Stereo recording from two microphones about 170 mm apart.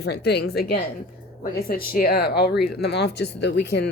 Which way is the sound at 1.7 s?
60° left (ahead or behind).